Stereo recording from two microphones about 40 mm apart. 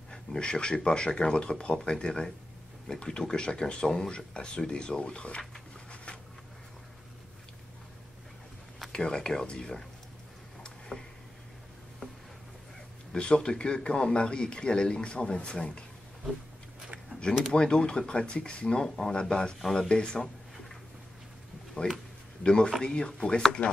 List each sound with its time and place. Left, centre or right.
0.1 s a man's voice: left
8.9 s a man's voice: left
10.6 s tick-tock: centre
13.1 s a man's voice: left
17.1 s a sound: left
17.5 s a man's voice: centre
21.8 s a man's voice: left